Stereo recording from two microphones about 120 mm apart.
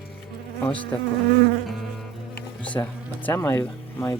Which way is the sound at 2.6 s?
10° left (ahead or behind).